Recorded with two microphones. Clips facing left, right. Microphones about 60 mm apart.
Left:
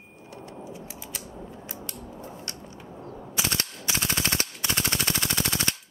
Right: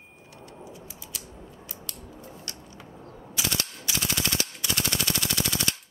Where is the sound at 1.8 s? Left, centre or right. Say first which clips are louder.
Left 4 dB; left.